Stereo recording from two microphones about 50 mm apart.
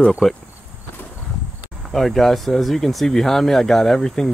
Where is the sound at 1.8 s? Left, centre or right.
Centre.